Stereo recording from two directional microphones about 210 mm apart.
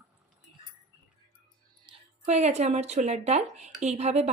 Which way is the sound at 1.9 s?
30° right (ahead or behind).